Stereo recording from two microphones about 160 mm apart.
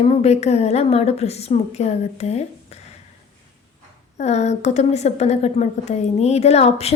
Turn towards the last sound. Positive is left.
turn(degrees=40)  # may be behind; listen again after turning